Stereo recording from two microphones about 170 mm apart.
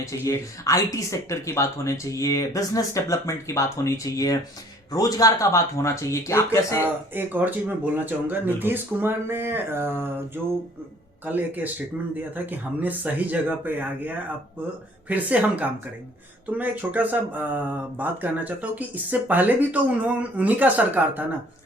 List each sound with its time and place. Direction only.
0.0 s speech: 20° left (ahead or behind)
6.8 s speech: 10° right (ahead or behind)